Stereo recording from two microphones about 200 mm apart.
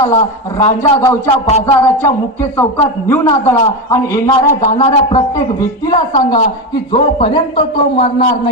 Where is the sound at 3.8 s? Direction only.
15° left (ahead or behind).